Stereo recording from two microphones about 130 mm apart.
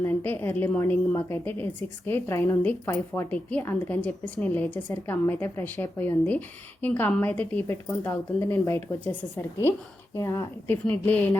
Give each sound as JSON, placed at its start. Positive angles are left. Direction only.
{"t": 0.0, "sound": "a woman's voice", "side_deg": 15}
{"t": 10.2, "sound": "speech", "side_deg": 25}
{"t": 10.8, "sound": "a woman's voice", "side_deg": 10}